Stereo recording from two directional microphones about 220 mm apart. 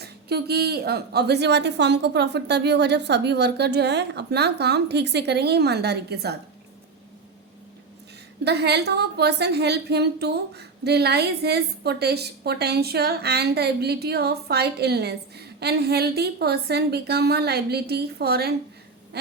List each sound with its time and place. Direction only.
0.0 s a woman's voice: 45° right (ahead or behind)
8.4 s a woman's voice: 50° right (ahead or behind)